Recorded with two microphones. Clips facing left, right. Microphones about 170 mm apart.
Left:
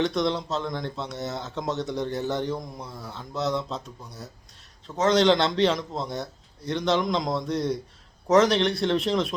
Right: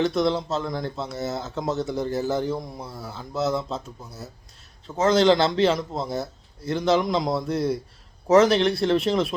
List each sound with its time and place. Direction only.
0.0 s speech: centre (ahead or behind)